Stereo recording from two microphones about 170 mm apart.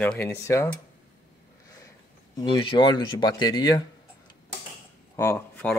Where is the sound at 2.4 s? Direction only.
30° left (ahead or behind).